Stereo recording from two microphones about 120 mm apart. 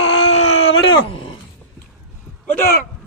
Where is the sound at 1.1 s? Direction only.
45° left (ahead or behind).